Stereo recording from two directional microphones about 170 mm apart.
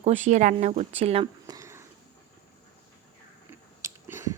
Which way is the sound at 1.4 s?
20° right (ahead or behind).